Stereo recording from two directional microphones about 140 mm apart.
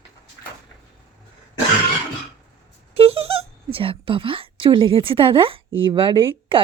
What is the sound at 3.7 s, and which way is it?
A woman's voice, 40° right (ahead or behind).